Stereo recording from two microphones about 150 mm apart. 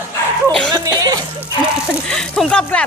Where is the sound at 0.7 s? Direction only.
25° right (ahead or behind).